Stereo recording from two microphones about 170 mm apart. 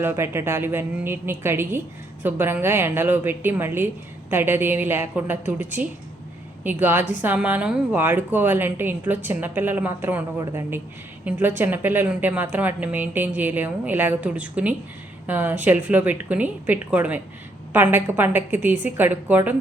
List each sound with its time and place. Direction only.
0.0 s speech: 15° right (ahead or behind)